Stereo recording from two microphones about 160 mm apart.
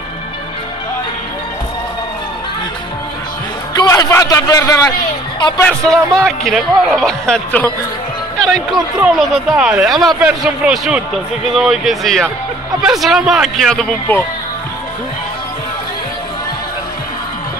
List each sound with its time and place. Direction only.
3.7 s a man's voice: 25° left (ahead or behind)
5.6 s speech: 5° left (ahead or behind)